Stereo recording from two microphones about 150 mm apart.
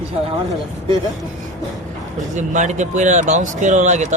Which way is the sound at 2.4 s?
55° right (ahead or behind).